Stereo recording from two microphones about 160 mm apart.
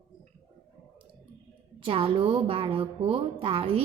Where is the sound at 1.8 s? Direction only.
35° right (ahead or behind).